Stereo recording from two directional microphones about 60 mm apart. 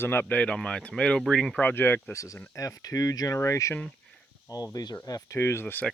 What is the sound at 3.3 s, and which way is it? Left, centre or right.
Speech, left.